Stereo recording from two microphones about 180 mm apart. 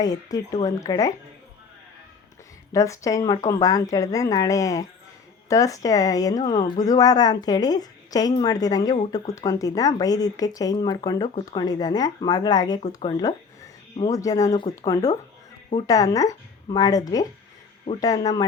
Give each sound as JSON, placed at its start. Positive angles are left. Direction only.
{"t": 0.0, "sound": "speech", "side_deg": 20}
{"t": 2.7, "sound": "speech", "side_deg": 15}